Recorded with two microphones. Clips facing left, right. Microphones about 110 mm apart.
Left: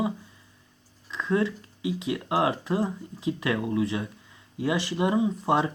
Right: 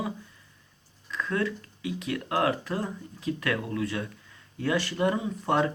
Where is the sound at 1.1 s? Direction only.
25° left (ahead or behind).